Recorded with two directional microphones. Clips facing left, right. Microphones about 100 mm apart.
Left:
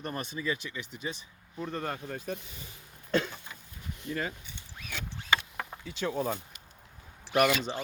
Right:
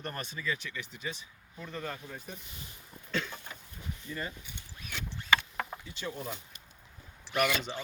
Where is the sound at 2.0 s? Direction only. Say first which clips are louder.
Left 8 dB; 85° left.